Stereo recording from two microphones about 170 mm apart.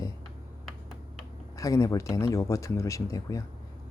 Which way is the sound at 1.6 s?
20° left (ahead or behind).